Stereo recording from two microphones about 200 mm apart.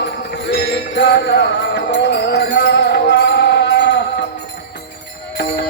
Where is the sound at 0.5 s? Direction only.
60° left (ahead or behind).